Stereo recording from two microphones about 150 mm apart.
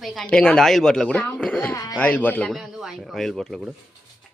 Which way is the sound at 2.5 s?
5° right (ahead or behind).